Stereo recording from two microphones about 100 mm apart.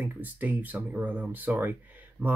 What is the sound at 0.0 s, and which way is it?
Speech, 15° right (ahead or behind).